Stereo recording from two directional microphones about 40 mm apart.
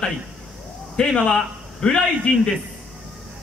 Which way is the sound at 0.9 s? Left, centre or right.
Left.